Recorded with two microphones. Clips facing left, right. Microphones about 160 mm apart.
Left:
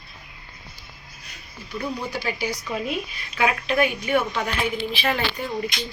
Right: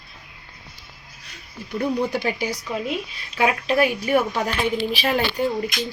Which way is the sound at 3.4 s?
35° right (ahead or behind).